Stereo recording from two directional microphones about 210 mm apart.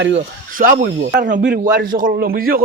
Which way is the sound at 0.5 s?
40° right (ahead or behind).